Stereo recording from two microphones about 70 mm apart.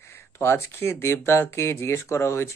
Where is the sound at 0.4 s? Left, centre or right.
Left.